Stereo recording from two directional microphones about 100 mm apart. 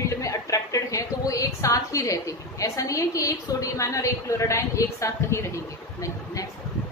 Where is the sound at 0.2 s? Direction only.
35° left (ahead or behind).